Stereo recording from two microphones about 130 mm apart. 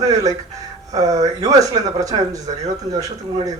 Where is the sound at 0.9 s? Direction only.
25° right (ahead or behind).